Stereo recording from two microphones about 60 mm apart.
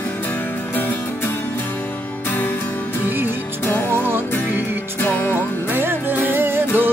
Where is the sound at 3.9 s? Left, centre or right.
Right.